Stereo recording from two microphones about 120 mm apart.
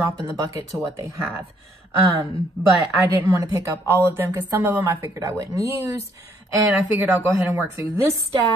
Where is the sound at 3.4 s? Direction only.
30° right (ahead or behind).